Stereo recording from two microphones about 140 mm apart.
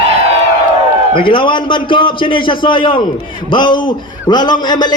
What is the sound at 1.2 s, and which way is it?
A man's voice, 35° left (ahead or behind).